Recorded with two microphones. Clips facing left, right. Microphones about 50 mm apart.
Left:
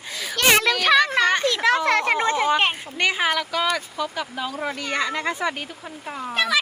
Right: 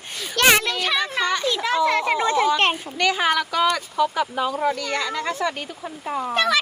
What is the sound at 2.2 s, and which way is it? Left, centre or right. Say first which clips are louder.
Speech: right 1 dB; left.